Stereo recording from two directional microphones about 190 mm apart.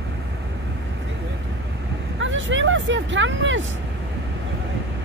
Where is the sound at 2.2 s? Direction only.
85° right.